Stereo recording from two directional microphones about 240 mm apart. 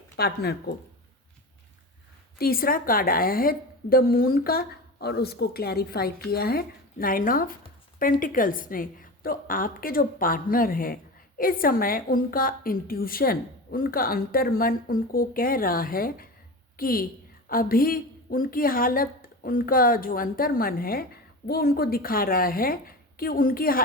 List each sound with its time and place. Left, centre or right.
0.2 s a woman's voice: left
2.4 s a woman's voice: left